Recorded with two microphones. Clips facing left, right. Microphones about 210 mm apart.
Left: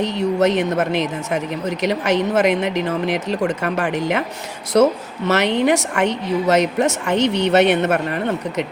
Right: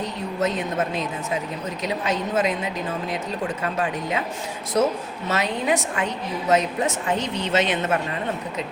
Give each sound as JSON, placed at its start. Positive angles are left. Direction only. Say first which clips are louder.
{"t": 0.0, "sound": "a woman's voice", "louder": "left 8 dB", "side_deg": 75}